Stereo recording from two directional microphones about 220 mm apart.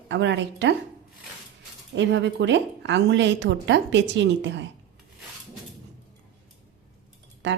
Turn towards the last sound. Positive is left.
turn(degrees=-55)  # may be behind; listen again after turning